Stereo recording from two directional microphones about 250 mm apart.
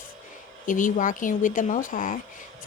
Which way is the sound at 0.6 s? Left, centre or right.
Left.